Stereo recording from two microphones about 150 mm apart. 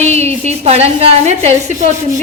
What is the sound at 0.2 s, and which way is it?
A woman's voice, 45° right (ahead or behind).